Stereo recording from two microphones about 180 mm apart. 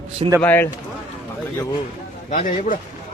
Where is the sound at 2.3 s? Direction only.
45° left (ahead or behind).